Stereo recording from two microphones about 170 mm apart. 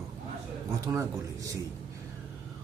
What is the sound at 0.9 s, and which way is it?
Speech, 15° right (ahead or behind).